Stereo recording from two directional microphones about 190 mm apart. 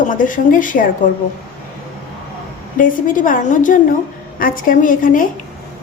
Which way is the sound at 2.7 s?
45° left (ahead or behind).